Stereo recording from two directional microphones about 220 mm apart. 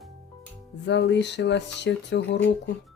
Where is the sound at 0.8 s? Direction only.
50° left (ahead or behind).